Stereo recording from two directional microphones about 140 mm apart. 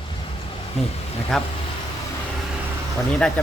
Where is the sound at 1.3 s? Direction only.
Centre (ahead or behind).